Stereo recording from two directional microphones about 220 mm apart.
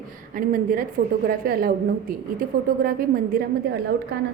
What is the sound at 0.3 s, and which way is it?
A woman's voice, 40° right (ahead or behind).